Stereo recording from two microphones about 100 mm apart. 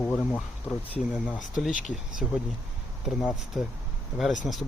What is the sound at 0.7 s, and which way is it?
Speech, 5° right (ahead or behind).